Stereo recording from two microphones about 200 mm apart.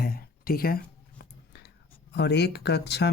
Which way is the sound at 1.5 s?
55° left (ahead or behind).